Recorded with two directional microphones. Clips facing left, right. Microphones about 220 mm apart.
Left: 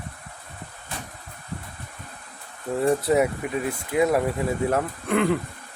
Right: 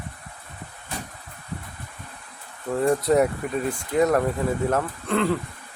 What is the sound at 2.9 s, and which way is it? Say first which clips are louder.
Speech: right 1 dB; 5° left (ahead or behind).